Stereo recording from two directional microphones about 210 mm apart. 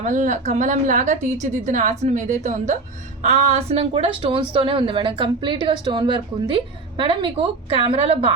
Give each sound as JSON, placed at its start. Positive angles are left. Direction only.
{"t": 0.0, "sound": "a woman's voice", "side_deg": -35}